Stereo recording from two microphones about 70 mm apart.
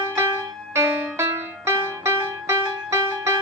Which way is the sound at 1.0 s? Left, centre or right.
Right.